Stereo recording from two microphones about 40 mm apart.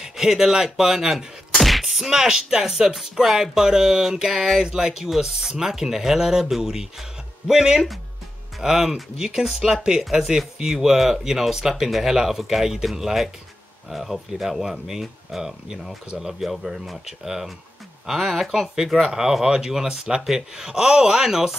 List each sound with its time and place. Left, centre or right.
0.0 s speech: centre